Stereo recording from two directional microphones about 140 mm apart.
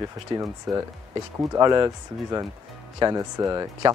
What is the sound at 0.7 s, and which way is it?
Speech, 5° right (ahead or behind).